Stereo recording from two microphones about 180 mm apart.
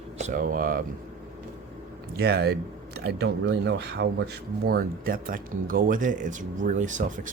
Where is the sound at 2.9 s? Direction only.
75° right (ahead or behind).